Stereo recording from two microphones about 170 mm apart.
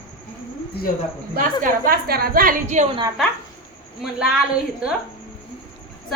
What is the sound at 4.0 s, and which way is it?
Speech, 5° right (ahead or behind).